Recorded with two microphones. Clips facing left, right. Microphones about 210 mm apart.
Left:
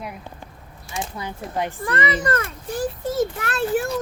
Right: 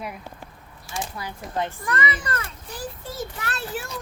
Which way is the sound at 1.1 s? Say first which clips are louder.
Left 2 dB; 20° left (ahead or behind).